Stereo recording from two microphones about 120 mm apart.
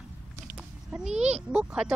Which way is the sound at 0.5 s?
5° right (ahead or behind).